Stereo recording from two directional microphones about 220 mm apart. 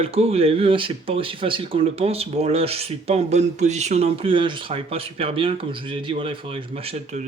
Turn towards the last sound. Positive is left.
turn(degrees=-25)  # may be behind; listen again after turning